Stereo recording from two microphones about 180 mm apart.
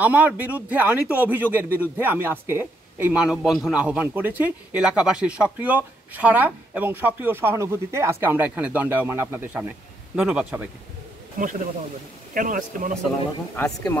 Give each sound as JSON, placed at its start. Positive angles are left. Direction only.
{"t": 0.0, "sound": "speech", "side_deg": -10}
{"t": 11.4, "sound": "speech", "side_deg": -50}
{"t": 13.6, "sound": "speech", "side_deg": 20}